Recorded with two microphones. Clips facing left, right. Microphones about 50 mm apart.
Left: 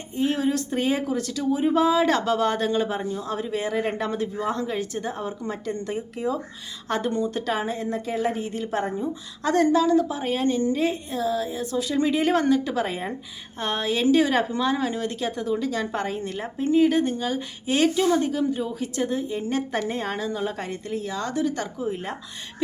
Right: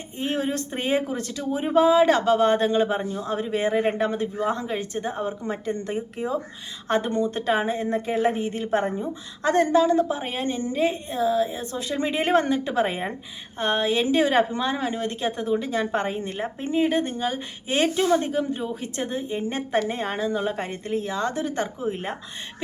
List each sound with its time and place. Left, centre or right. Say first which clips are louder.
0.2 s speech: left 3 dB; right